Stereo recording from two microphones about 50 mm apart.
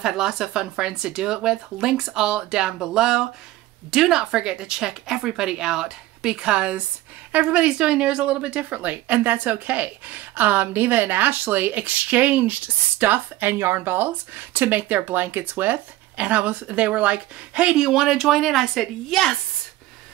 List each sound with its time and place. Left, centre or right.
0.0 s a woman's voice: centre; by 17.7 s right
17.7 s a woman's voice: centre